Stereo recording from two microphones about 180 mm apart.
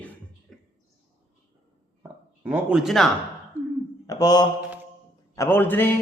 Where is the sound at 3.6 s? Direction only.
10° left (ahead or behind).